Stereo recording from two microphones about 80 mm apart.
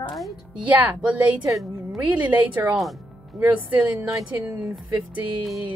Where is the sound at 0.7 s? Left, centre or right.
Centre.